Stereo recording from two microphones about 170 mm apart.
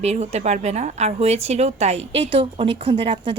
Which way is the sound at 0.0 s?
40° right (ahead or behind).